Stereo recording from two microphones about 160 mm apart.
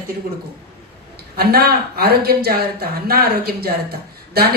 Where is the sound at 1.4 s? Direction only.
75° right (ahead or behind).